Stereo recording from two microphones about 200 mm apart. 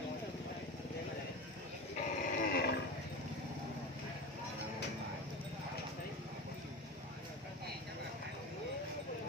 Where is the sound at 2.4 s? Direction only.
50° left (ahead or behind).